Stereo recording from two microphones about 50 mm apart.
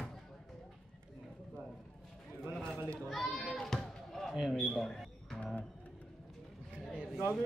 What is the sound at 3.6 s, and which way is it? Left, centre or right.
Basketball bounce, centre.